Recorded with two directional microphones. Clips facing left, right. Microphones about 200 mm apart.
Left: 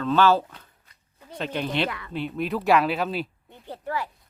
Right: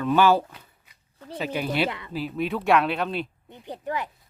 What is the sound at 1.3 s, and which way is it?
Speech, 5° right (ahead or behind).